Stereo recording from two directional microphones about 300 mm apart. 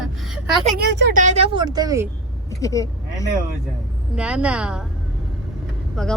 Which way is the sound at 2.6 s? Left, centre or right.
Centre.